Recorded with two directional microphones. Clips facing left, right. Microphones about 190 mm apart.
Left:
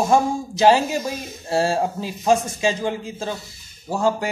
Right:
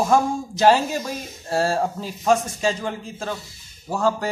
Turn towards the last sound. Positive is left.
turn(degrees=5)  # may be behind; listen again after turning